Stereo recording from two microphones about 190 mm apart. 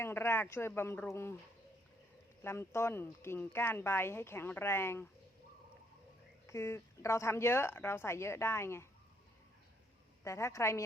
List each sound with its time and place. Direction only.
0.0 s speech: 15° left (ahead or behind)
2.4 s speech: 15° left (ahead or behind)
6.5 s speech: 15° left (ahead or behind)
10.2 s speech: 15° left (ahead or behind)